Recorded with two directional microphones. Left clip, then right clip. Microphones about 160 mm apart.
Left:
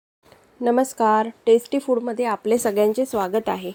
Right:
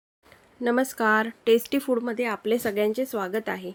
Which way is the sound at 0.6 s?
Centre (ahead or behind).